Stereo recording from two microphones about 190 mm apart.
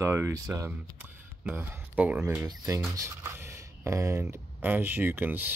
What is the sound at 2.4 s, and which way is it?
Speech, 20° right (ahead or behind).